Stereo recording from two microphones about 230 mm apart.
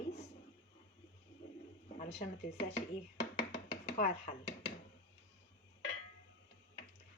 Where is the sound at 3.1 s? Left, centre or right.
Left.